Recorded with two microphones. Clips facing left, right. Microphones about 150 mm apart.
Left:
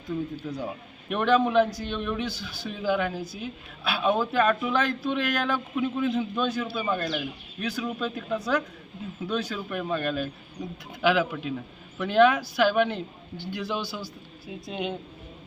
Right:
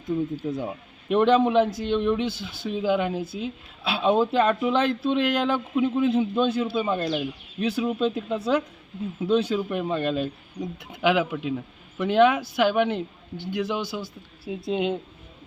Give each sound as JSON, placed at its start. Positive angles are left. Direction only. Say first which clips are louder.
{"t": 0.0, "sound": "a man's voice", "louder": "right 5 dB", "side_deg": -20}